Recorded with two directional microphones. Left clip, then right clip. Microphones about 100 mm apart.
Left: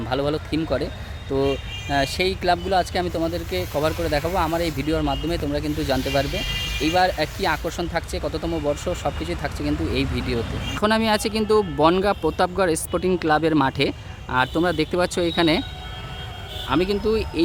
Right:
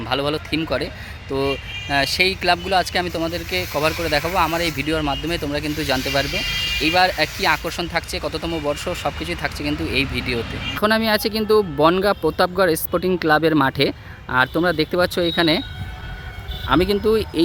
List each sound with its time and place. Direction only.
0.1 s speech: centre (ahead or behind)
10.8 s speech: 10° right (ahead or behind)
16.6 s speech: 25° right (ahead or behind)